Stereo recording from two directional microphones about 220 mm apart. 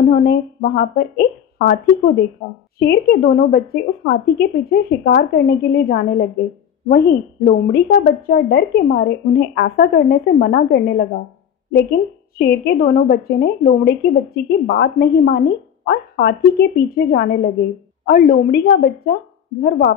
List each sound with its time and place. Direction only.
0.1 s speech: 45° left (ahead or behind)
12.4 s speech: 45° left (ahead or behind)